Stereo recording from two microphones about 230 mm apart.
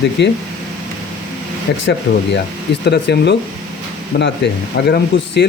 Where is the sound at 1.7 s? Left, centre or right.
Left.